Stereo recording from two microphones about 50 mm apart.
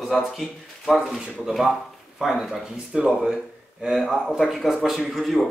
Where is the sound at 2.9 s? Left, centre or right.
Centre.